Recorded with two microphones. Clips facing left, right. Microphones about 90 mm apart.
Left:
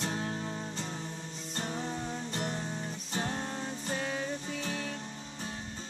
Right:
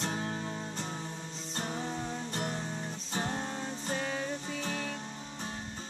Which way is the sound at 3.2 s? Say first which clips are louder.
Even; 20° right (ahead or behind).